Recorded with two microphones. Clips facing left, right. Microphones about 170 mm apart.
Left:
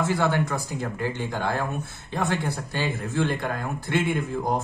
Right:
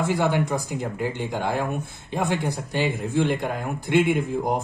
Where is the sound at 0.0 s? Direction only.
15° right (ahead or behind).